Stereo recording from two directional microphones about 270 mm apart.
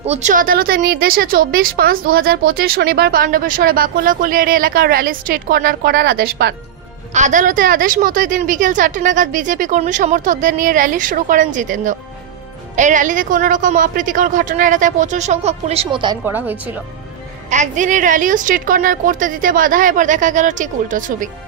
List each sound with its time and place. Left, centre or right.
0.0 s a woman's voice: right; by 16.8 s centre
17.5 s a woman's voice: right